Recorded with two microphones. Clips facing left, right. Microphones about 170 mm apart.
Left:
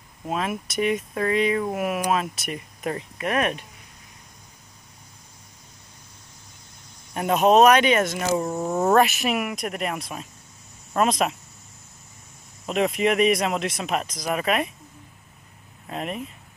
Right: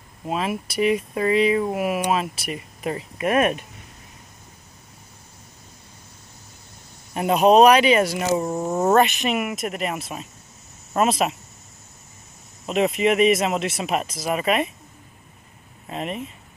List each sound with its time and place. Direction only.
0.3 s speech: 5° right (ahead or behind)
3.2 s speech: 15° right (ahead or behind)
7.2 s speech: 5° right (ahead or behind)
12.6 s speech: centre (ahead or behind)
15.9 s speech: centre (ahead or behind)